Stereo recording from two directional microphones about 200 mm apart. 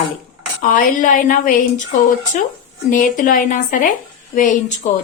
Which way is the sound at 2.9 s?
40° left (ahead or behind).